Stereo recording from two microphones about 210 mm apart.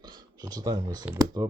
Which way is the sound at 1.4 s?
20° right (ahead or behind).